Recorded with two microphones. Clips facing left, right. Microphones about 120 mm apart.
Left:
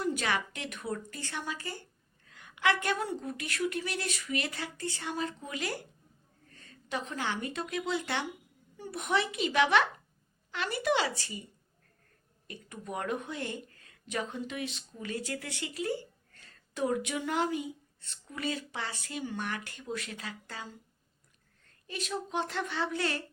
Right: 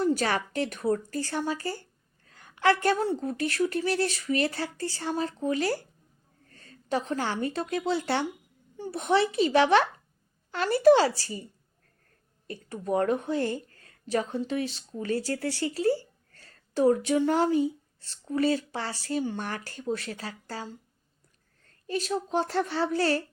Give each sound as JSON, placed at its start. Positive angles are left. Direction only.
{"t": 0.0, "sound": "a woman's voice", "side_deg": -35}
{"t": 12.5, "sound": "speech", "side_deg": -35}